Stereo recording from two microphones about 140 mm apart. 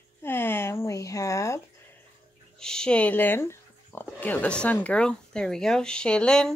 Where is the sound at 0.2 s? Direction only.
15° left (ahead or behind).